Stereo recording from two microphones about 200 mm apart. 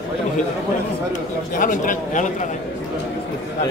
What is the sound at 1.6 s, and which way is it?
Speech, 40° left (ahead or behind).